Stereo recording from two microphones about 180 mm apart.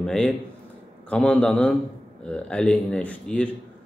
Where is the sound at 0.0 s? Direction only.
5° left (ahead or behind).